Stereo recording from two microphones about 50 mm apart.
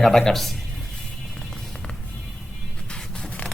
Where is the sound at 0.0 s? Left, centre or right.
Centre.